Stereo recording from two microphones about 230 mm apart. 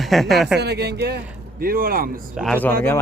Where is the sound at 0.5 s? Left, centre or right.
Right.